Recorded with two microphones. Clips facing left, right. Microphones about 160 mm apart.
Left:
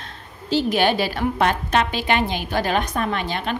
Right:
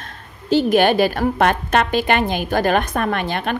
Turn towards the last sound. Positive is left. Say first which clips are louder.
# right 3 dB
turn(degrees=-55)  # may be behind; listen again after turning